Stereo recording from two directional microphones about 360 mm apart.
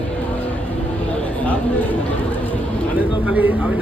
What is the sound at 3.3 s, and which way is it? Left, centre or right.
Speech, centre.